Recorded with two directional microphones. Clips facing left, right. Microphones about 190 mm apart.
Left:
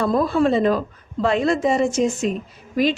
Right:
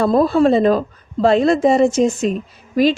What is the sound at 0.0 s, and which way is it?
A woman's voice, 30° right (ahead or behind).